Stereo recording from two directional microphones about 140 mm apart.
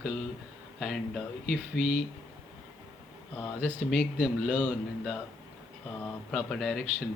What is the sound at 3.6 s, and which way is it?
A man's voice, 10° right (ahead or behind).